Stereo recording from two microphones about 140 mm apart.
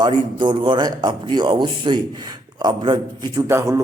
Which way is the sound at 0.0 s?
35° right (ahead or behind).